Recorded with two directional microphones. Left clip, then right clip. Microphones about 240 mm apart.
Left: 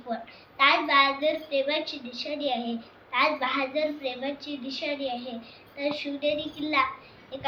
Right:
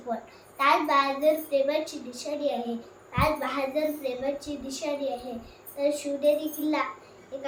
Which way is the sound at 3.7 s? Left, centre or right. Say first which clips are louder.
Even; centre.